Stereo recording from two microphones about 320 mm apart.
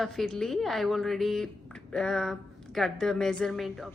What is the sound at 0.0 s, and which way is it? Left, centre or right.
Speech, centre.